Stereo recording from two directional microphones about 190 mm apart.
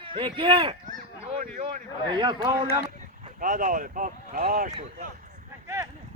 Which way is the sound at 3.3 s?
45° right (ahead or behind).